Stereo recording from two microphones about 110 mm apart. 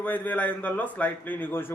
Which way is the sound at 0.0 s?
15° left (ahead or behind).